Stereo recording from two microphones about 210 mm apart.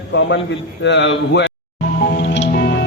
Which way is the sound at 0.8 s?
55° left (ahead or behind).